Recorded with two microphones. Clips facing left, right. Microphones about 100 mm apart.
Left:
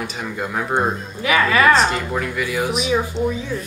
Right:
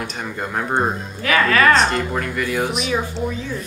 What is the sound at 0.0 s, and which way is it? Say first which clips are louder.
Speech: left 1 dB; centre (ahead or behind).